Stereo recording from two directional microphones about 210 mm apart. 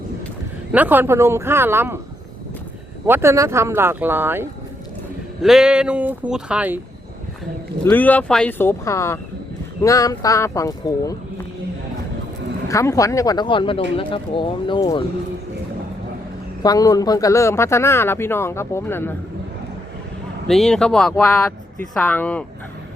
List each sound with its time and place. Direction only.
0.7 s speech: 10° right (ahead or behind)
3.1 s speech: 10° right (ahead or behind)
7.9 s speech: 10° left (ahead or behind)
12.6 s speech: 15° left (ahead or behind)
16.6 s speech: 15° left (ahead or behind)
20.5 s speech: centre (ahead or behind)